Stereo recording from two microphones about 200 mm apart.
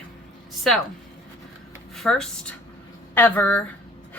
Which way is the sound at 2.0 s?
5° left (ahead or behind).